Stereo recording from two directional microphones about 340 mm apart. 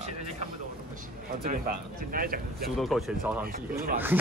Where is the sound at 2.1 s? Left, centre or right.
Right.